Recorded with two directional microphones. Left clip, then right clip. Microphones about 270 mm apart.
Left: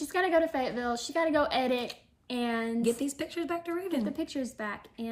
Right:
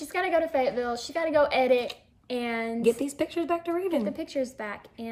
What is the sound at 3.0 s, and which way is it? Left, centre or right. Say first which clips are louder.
Speech: right 5 dB; centre.